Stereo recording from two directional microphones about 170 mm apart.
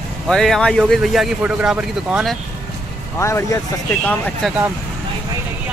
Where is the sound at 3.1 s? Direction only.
15° left (ahead or behind).